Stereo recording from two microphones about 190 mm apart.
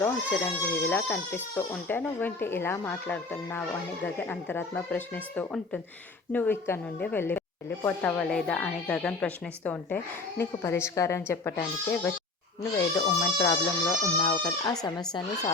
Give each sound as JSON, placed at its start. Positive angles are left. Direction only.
{"t": 0.0, "sound": "speech", "side_deg": 10}